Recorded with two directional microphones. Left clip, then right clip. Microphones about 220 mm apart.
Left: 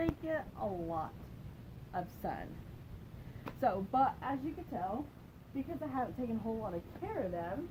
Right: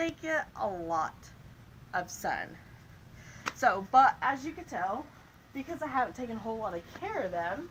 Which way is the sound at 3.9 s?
5° left (ahead or behind).